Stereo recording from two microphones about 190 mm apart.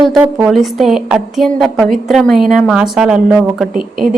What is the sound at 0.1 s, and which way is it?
A woman's voice, 5° right (ahead or behind).